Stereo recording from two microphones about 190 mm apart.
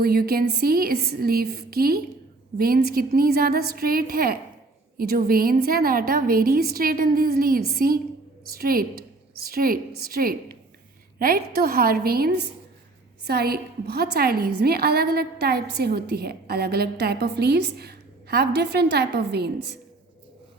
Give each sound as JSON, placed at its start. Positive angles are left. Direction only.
{"t": 0.0, "sound": "a woman's voice", "side_deg": -55}